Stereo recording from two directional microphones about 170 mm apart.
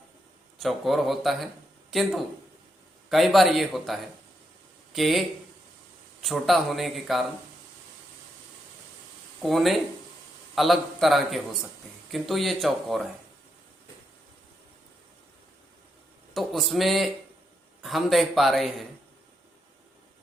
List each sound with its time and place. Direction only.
0.6 s speech: centre (ahead or behind)
6.2 s speech: centre (ahead or behind)
9.4 s a man's voice: centre (ahead or behind)
16.3 s speech: centre (ahead or behind)